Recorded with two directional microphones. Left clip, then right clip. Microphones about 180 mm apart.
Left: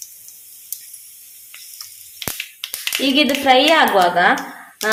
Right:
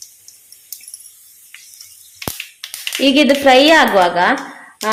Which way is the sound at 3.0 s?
25° right (ahead or behind).